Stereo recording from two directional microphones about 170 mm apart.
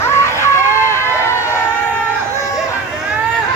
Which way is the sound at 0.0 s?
15° left (ahead or behind).